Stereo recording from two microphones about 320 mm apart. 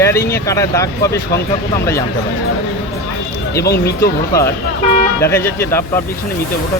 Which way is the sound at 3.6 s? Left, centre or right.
Left.